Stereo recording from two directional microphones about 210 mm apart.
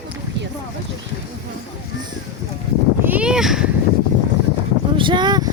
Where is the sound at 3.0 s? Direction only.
5° right (ahead or behind).